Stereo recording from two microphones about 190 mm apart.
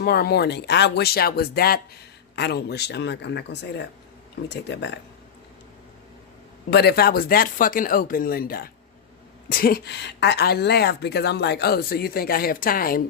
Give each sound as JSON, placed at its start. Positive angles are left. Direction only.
{"t": 0.0, "sound": "speech", "side_deg": 55}
{"t": 6.7, "sound": "speech", "side_deg": 60}